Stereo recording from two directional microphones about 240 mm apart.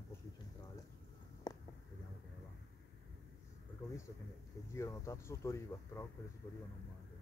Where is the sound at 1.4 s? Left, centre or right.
Centre.